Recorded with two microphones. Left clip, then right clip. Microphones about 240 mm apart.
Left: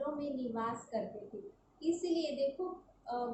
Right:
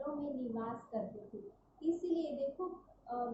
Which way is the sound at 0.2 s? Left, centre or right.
Centre.